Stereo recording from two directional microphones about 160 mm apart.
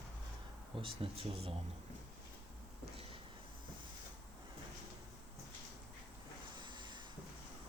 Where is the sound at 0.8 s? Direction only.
35° right (ahead or behind).